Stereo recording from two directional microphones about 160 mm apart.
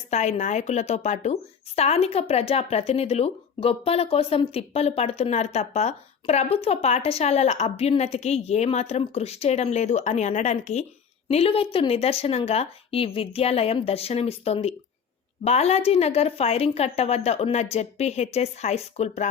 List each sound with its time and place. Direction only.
0.1 s a woman's voice: 45° left (ahead or behind)